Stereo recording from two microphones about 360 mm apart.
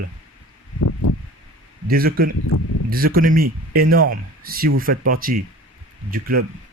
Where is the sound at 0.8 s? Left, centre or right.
Left.